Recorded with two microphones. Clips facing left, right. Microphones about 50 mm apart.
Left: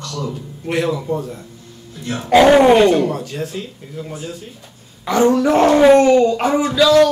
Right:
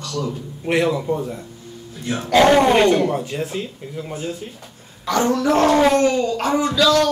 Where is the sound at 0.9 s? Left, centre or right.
Centre.